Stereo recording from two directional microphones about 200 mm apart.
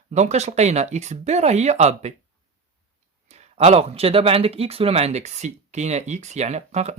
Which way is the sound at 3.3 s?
35° right (ahead or behind).